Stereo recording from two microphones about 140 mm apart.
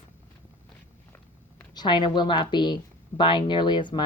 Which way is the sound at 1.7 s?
35° left (ahead or behind).